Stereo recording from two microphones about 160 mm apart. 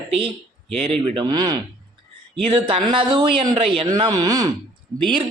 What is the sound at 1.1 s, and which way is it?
Speech, 25° right (ahead or behind).